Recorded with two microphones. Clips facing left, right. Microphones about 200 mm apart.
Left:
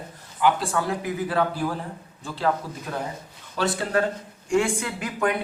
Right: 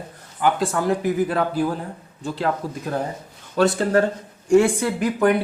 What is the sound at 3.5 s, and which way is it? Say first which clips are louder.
Speech: right 6 dB; 45° right (ahead or behind).